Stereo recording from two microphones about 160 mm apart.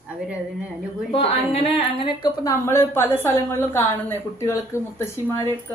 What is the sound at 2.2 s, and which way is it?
A woman's voice, 20° left (ahead or behind).